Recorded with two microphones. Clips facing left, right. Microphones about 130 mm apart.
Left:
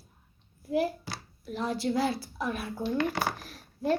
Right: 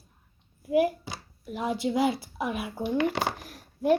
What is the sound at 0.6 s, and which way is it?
Speech, 10° right (ahead or behind).